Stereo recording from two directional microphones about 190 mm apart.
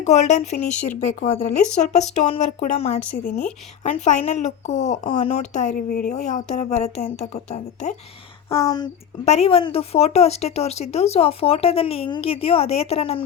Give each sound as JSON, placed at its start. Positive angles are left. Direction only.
{"t": 0.0, "sound": "speech", "side_deg": 35}
{"t": 5.0, "sound": "speech", "side_deg": 30}
{"t": 8.5, "sound": "speech", "side_deg": 20}
{"t": 9.2, "sound": "speech", "side_deg": 35}